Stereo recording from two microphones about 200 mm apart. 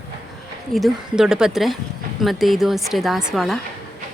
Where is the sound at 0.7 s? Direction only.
Centre (ahead or behind).